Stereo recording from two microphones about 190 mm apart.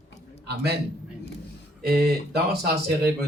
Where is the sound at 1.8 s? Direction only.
55° right (ahead or behind).